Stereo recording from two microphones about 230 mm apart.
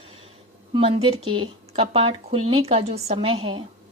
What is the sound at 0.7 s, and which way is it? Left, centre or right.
Speech, right.